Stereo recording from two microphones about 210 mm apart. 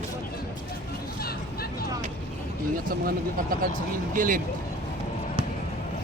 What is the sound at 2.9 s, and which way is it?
Speech, 40° right (ahead or behind).